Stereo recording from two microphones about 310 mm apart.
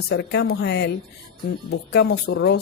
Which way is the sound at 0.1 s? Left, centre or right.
Left.